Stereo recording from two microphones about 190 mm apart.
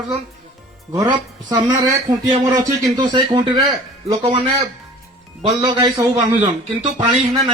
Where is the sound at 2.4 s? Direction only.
20° right (ahead or behind).